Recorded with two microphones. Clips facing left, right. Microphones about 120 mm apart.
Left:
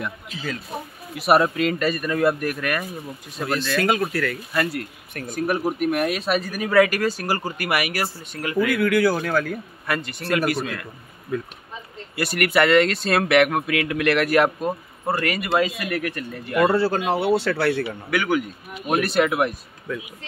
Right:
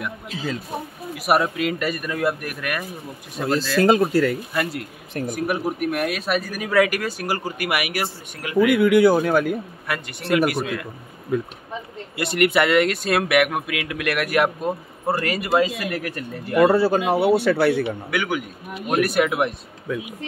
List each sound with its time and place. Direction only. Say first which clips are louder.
1.1 s speech: left 2 dB; 5° right (ahead or behind)
3.7 s speech: right 6 dB; 30° right (ahead or behind); by 5.6 s 15° right (ahead or behind)
5.7 s speech: left 1 dB; centre (ahead or behind)
8.6 s speech: right 5 dB; 20° right (ahead or behind)
12.2 s speech: right 1 dB; 20° right (ahead or behind)
15.2 s speech: right 2 dB; 30° right (ahead or behind)
16.5 s speech: right 3 dB; 15° right (ahead or behind)